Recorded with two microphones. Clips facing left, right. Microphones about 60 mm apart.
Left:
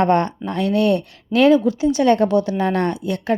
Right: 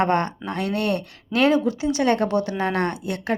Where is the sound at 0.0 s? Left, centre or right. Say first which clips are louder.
Left 4 dB; right.